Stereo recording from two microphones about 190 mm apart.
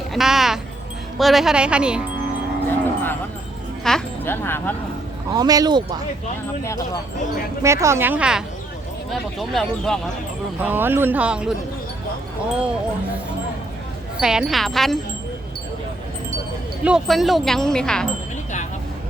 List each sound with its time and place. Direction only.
0.1 s speech: centre (ahead or behind)
2.6 s livestock: 10° left (ahead or behind)
3.8 s speech: 5° left (ahead or behind)
5.3 s speech: 20° right (ahead or behind)
6.7 s speech: 15° left (ahead or behind)
7.6 s speech: 15° right (ahead or behind); by 10.0 s centre (ahead or behind)
10.6 s speech: 10° right (ahead or behind)
14.2 s speech: 5° right (ahead or behind)
16.8 s speech: centre (ahead or behind)